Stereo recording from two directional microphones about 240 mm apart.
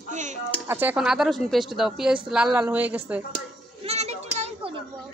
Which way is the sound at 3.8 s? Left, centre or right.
Right.